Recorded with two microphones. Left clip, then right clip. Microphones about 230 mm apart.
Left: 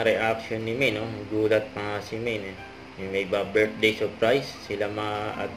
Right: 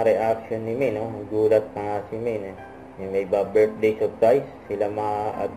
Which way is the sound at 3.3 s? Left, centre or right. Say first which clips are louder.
Right 5 dB; left.